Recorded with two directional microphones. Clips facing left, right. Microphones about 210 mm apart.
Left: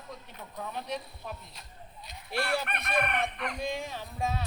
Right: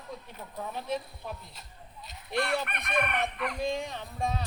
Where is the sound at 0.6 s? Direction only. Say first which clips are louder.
Right 2 dB; centre (ahead or behind).